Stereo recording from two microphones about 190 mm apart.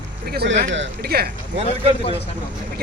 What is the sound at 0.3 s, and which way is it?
Speech, 60° right (ahead or behind).